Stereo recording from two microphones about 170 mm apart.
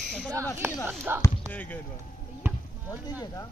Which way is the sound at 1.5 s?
10° left (ahead or behind).